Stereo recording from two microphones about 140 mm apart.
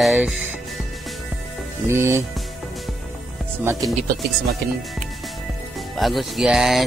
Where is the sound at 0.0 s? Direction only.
Centre (ahead or behind).